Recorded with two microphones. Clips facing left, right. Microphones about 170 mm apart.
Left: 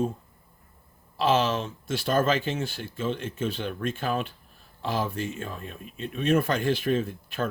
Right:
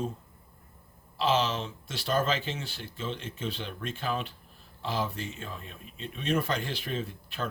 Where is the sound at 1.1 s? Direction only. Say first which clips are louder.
Left 4 dB; 50° left (ahead or behind).